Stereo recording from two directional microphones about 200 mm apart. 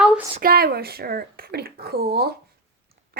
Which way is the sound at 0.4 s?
50° right (ahead or behind).